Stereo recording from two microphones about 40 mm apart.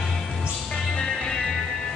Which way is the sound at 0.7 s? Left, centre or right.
Left.